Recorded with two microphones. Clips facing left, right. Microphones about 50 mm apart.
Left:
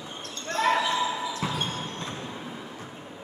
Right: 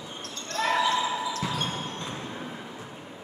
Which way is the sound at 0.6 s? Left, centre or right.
Centre.